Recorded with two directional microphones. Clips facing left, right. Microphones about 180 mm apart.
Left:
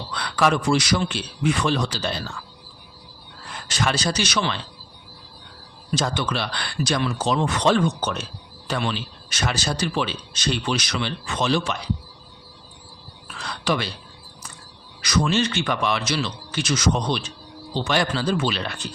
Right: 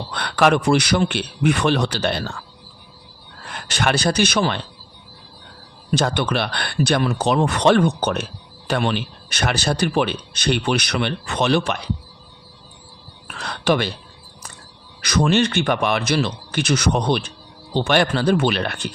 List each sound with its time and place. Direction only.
0.1 s speech: 60° right (ahead or behind)
3.4 s a man's voice: 65° right (ahead or behind)
5.9 s speech: 60° right (ahead or behind)
13.2 s a sound: 60° right (ahead or behind)
15.0 s speech: 55° right (ahead or behind)